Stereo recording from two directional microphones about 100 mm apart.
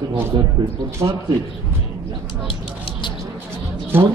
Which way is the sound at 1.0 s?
45° right (ahead or behind).